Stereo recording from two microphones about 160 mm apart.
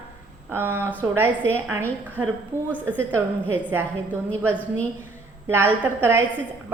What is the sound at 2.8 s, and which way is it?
A woman's voice, 15° right (ahead or behind).